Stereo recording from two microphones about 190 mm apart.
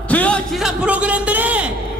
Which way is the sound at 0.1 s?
5° left (ahead or behind).